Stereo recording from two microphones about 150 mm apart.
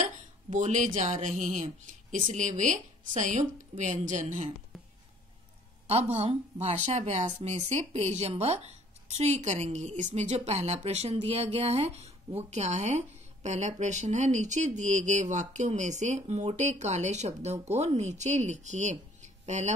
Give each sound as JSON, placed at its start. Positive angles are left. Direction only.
{"t": 0.0, "sound": "speech", "side_deg": -55}
{"t": 5.9, "sound": "speech", "side_deg": -45}